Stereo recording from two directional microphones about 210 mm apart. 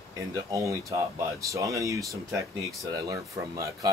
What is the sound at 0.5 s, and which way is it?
Speech, 15° right (ahead or behind).